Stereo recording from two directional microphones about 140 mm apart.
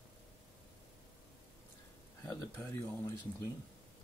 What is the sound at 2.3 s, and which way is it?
Speech, 15° left (ahead or behind).